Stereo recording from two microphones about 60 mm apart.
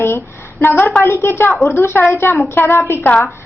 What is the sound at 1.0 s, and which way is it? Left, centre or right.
A woman's voice, left.